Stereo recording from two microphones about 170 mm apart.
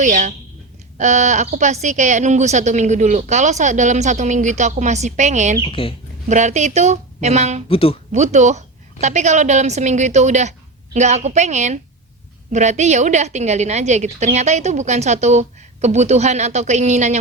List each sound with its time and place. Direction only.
0.0 s a woman's voice: 45° right (ahead or behind)
5.6 s speech: 30° left (ahead or behind)
6.2 s a woman's voice: 45° right (ahead or behind)
7.7 s speech: 35° left (ahead or behind)
8.1 s a woman's voice: 45° right (ahead or behind)